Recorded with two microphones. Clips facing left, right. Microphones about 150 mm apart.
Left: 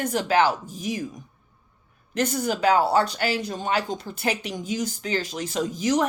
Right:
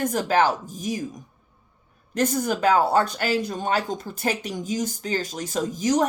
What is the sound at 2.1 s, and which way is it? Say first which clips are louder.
Speech: right 2 dB; 45° right (ahead or behind).